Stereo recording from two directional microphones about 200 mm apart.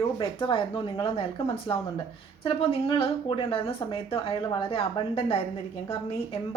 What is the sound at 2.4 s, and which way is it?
A woman's voice, 25° left (ahead or behind).